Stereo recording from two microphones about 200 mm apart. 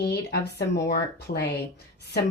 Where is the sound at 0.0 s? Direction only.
55° left (ahead or behind).